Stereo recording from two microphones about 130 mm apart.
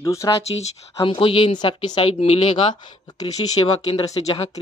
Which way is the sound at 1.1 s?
45° left (ahead or behind).